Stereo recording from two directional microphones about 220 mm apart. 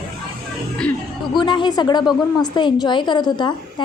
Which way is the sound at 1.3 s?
20° left (ahead or behind).